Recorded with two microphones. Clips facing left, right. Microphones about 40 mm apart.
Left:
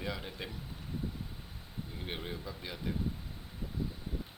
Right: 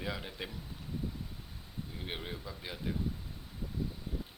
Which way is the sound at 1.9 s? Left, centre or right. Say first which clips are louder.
Left 1 dB; centre.